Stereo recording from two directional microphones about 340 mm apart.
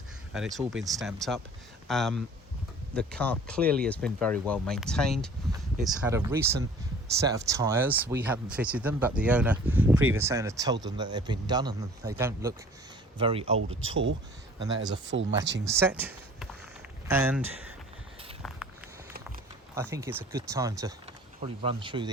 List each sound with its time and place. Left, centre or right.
0.3 s speech: centre
13.6 s speech: right
15.6 s speech: centre
19.7 s speech: centre